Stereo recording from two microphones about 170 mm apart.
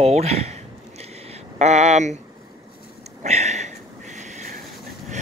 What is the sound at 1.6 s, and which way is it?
Speech, 40° right (ahead or behind).